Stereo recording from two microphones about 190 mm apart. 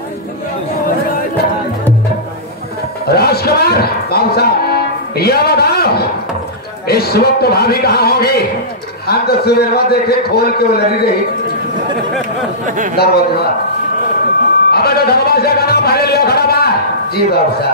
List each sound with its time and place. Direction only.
3.1 s speech: 55° left (ahead or behind)
6.9 s music: 55° left (ahead or behind)
12.6 s speech: 40° right (ahead or behind)
12.9 s music: 55° left (ahead or behind)
14.7 s music: 55° left (ahead or behind)